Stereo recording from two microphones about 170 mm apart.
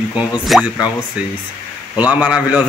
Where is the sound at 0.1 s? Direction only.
5° right (ahead or behind).